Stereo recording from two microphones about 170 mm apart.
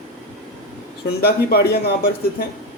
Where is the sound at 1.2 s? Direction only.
70° left (ahead or behind).